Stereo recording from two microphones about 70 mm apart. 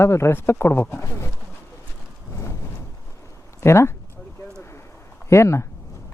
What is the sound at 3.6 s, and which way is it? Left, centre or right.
Speech, left.